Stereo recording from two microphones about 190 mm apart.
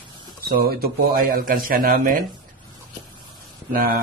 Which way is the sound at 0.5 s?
50° right (ahead or behind).